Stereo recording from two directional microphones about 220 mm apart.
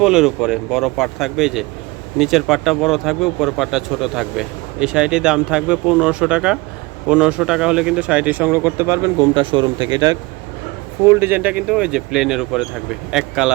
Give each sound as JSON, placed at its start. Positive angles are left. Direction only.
{"t": 0.0, "sound": "speech", "side_deg": -5}
{"t": 9.3, "sound": "speech", "side_deg": -25}